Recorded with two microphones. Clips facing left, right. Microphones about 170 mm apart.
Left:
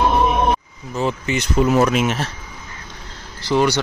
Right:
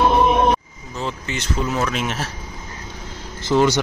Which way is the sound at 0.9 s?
15° left (ahead or behind).